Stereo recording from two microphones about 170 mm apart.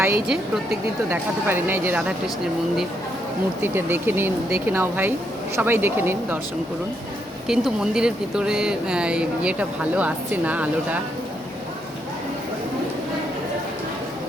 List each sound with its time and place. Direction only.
0.0 s speech: 15° right (ahead or behind)
3.6 s speech: 15° right (ahead or behind)
7.4 s speech: 5° right (ahead or behind)